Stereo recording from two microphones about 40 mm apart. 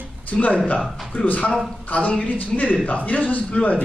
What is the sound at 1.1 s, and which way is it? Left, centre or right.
A man's voice, left.